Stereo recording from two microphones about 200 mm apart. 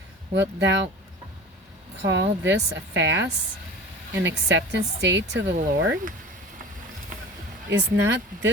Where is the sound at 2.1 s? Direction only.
60° right (ahead or behind).